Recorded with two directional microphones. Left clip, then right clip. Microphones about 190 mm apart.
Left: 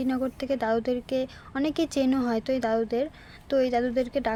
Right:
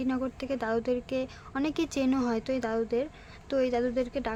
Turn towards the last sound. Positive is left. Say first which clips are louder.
# left 4 dB
turn(degrees=15)  # may be behind; listen again after turning